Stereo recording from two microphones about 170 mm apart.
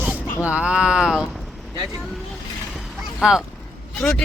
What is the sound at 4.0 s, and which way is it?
Speech, 5° left (ahead or behind).